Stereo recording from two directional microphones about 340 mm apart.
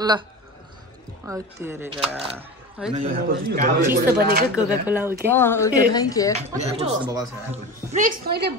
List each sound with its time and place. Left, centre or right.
1.2 s speech: centre
2.9 s speech: right
4.6 s speech: centre
5.3 s speech: centre
6.3 s speech: centre
7.9 s speech: right